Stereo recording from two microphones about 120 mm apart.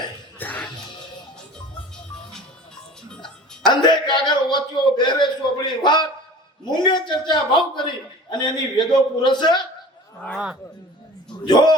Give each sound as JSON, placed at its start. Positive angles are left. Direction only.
{"t": 0.3, "sound": "music", "side_deg": 15}
{"t": 3.6, "sound": "a sound", "side_deg": 40}
{"t": 6.7, "sound": "a man's voice", "side_deg": 40}
{"t": 10.3, "sound": "speech", "side_deg": -10}
{"t": 11.4, "sound": "a man's voice", "side_deg": 35}